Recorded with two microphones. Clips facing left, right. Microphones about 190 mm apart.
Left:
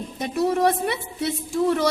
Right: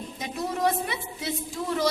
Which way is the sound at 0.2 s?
65° left (ahead or behind).